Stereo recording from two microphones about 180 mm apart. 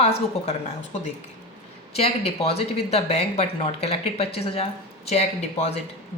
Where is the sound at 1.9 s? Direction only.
35° left (ahead or behind).